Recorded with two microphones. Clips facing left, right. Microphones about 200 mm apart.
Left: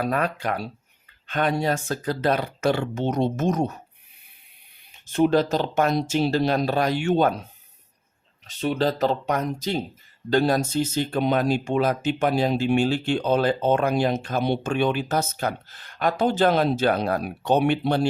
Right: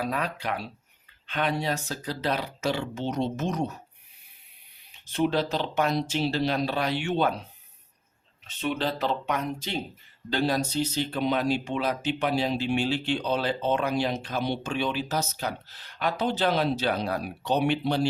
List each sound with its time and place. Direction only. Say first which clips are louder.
0.0 s speech: left 5 dB; 50° left (ahead or behind)
5.0 s speech: left 6 dB; 45° left (ahead or behind)
8.4 s speech: left 5 dB; 35° left (ahead or behind)